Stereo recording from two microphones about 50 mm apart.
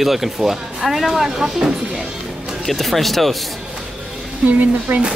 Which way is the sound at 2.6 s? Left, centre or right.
Centre.